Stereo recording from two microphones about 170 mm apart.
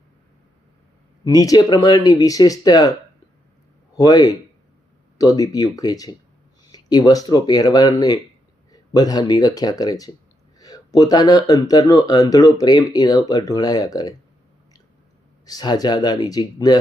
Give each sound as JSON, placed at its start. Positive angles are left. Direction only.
{"t": 1.2, "sound": "speech", "side_deg": 20}
{"t": 3.9, "sound": "speech", "side_deg": 20}
{"t": 15.4, "sound": "speech", "side_deg": 25}